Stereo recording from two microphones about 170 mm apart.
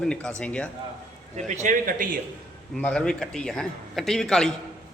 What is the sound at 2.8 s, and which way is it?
A man's voice, 5° left (ahead or behind).